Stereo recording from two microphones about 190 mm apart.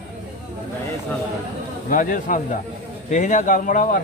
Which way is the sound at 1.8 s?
45° left (ahead or behind).